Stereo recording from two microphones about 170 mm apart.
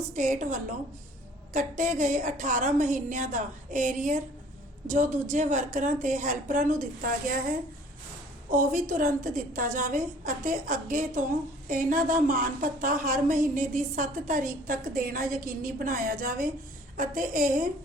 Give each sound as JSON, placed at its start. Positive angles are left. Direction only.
{"t": 0.1, "sound": "a woman's voice", "side_deg": -50}
{"t": 8.5, "sound": "a woman's voice", "side_deg": -50}